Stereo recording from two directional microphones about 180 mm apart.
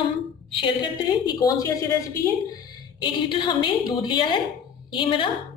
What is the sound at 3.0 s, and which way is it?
A woman's voice, 25° left (ahead or behind).